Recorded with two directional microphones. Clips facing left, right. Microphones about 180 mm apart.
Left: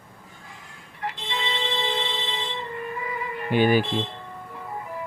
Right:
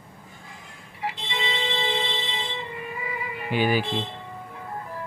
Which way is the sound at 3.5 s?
50° left (ahead or behind).